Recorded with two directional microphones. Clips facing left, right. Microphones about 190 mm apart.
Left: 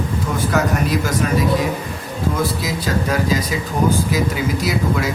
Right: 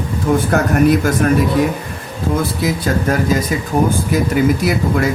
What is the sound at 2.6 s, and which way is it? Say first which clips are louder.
Speech: right 4 dB; 50° right (ahead or behind).